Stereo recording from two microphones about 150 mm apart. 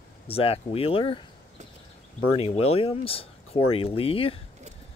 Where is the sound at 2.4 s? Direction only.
40° left (ahead or behind).